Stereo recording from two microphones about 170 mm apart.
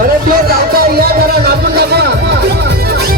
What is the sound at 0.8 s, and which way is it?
Music, 65° right (ahead or behind).